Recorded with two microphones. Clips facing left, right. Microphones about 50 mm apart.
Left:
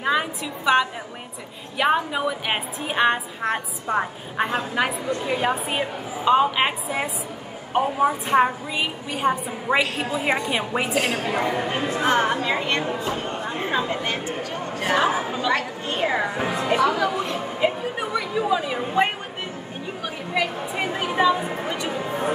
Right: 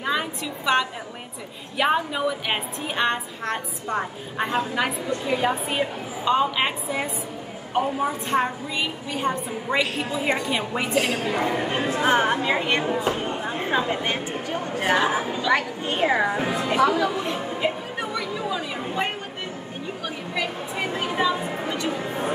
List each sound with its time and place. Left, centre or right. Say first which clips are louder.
0.0 s a sound: left 3 dB; centre
1.8 s a woman's voice: left 1 dB; centre
10.9 s speech: even; centre
12.0 s speech: even; centre
13.2 s a sound: right 1 dB; centre
13.7 s a woman's voice: right 1 dB; centre
16.0 s speech: right 2 dB; centre
16.3 s speech: even; centre
17.6 s a sound: left 3 dB; centre
20.3 s speech: left 4 dB; centre